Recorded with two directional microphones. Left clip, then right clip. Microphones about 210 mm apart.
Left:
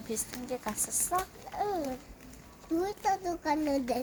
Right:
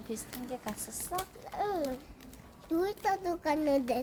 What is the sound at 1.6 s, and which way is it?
Speech, 10° left (ahead or behind).